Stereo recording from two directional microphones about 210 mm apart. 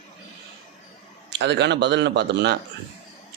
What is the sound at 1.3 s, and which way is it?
A man's voice, 55° right (ahead or behind).